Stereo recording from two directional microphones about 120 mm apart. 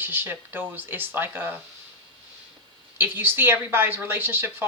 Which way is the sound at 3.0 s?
15° right (ahead or behind).